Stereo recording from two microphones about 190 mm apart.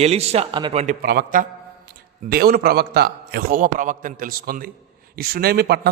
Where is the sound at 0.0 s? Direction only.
35° right (ahead or behind).